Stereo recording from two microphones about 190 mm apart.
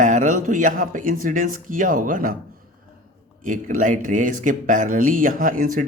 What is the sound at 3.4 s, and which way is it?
Speech, 45° right (ahead or behind).